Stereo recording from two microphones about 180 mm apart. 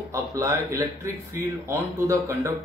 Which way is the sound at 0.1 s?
15° right (ahead or behind).